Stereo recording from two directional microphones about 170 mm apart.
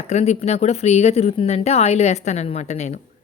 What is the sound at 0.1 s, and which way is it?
Speech, 40° left (ahead or behind).